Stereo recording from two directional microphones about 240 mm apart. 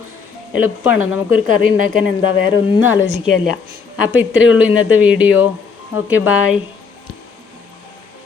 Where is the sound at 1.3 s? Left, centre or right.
Left.